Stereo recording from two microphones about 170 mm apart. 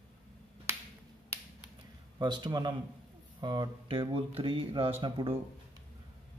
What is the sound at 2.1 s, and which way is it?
Speech, 25° right (ahead or behind).